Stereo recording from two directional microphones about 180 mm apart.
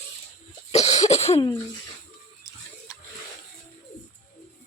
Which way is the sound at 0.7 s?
35° left (ahead or behind).